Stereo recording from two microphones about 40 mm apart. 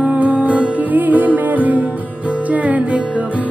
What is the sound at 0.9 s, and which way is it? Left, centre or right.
Music, right.